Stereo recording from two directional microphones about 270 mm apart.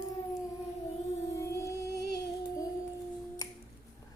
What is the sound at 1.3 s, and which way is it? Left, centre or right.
Music, centre.